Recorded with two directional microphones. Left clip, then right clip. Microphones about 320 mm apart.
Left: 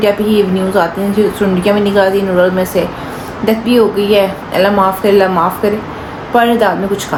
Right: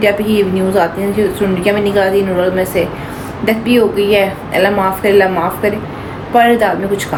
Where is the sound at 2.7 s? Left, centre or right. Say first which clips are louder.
Left 1 dB; centre.